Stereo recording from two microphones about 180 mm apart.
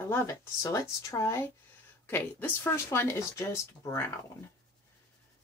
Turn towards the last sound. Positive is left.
turn(degrees=15)  # may be behind; listen again after turning